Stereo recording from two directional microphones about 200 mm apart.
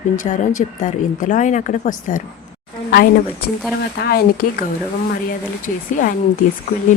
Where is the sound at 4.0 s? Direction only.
50° left (ahead or behind).